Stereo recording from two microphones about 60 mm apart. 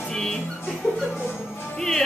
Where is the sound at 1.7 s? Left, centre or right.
Centre.